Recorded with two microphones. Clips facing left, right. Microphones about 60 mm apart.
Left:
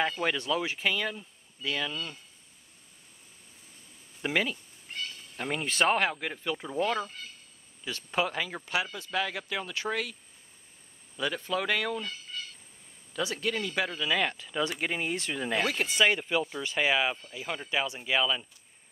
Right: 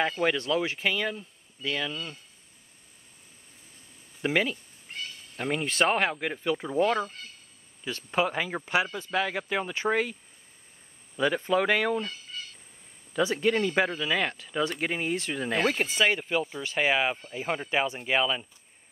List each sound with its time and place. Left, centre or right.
0.0 s speech: centre
4.2 s speech: centre; by 10.1 s right
11.1 s speech: right
12.0 s fowl: centre
13.2 s speech: right
13.8 s speech: centre
17.2 s speech: right; by 18.5 s centre